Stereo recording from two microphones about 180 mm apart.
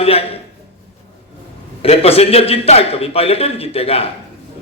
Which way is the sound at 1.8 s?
35° left (ahead or behind).